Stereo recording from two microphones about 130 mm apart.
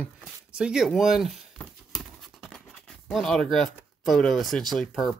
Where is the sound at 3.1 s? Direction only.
5° left (ahead or behind).